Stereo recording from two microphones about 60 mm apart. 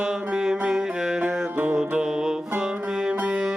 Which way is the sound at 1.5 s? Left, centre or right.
Right.